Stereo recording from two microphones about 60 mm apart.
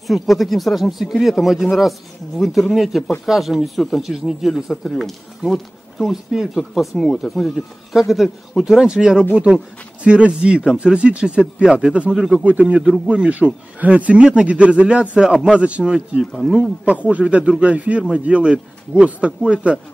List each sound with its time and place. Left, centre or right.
0.0 s speech: centre
12.4 s a man's voice: right
16.8 s a man's voice: right